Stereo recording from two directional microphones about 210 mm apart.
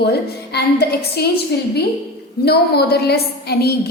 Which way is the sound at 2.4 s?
50° left (ahead or behind).